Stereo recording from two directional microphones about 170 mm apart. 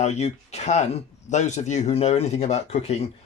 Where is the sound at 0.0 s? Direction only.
40° left (ahead or behind).